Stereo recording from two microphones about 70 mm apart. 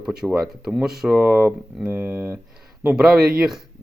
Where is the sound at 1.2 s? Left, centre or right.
Right.